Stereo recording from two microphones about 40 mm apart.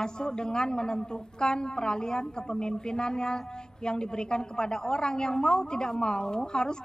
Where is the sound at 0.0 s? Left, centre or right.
Centre.